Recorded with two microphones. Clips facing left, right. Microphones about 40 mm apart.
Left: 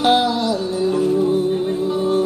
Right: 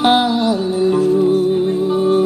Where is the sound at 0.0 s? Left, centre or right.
Right.